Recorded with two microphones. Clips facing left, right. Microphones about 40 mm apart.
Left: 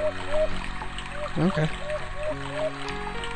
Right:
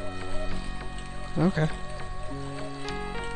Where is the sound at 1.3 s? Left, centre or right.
Left.